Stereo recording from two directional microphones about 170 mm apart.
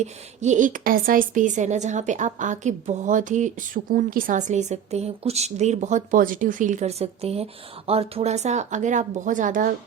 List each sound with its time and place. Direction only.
0.0 s a woman's voice: 45° right (ahead or behind)